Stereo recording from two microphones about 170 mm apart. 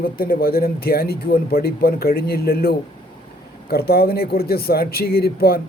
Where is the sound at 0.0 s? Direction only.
60° left (ahead or behind).